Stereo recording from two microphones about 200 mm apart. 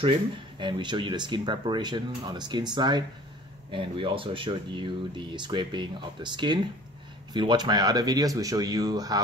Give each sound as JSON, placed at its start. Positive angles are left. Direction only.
{"t": 0.6, "sound": "speech", "side_deg": -25}